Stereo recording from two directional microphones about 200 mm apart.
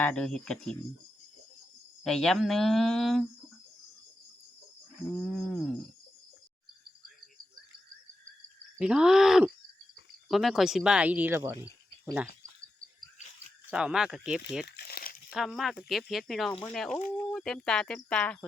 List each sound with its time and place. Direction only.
0.0 s speech: 5° left (ahead or behind)
2.0 s speech: centre (ahead or behind)
5.2 s speech: centre (ahead or behind)
8.8 s speech: 5° right (ahead or behind)
13.7 s speech: 5° right (ahead or behind)
14.8 s crumpling: 50° left (ahead or behind)
15.3 s speech: centre (ahead or behind)